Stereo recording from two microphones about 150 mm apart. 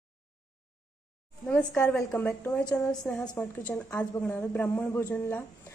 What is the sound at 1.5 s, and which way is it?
A woman's voice, 10° left (ahead or behind).